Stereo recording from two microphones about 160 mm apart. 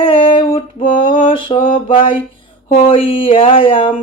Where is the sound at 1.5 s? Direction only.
55° left (ahead or behind).